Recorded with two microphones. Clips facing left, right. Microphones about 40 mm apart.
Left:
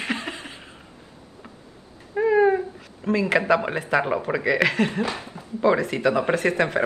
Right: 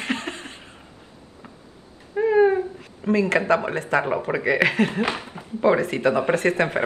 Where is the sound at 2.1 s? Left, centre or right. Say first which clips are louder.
Right 1 dB; centre.